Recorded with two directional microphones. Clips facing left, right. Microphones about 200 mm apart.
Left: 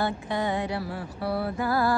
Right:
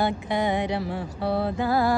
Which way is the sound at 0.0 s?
15° right (ahead or behind).